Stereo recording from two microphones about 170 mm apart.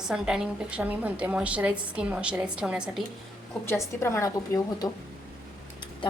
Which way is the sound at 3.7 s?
15° left (ahead or behind).